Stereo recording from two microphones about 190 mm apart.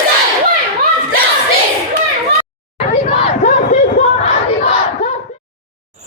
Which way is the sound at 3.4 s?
40° left (ahead or behind).